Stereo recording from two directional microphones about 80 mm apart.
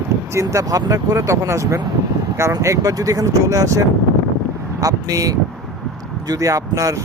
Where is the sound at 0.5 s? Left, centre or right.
Right.